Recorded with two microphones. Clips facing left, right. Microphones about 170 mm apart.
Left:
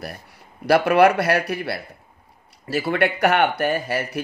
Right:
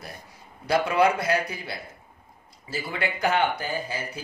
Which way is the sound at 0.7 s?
70° left (ahead or behind).